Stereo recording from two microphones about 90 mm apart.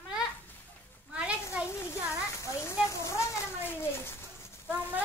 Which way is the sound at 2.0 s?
35° left (ahead or behind).